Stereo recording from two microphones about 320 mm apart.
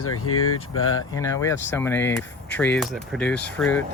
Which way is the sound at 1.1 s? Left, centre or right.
Centre.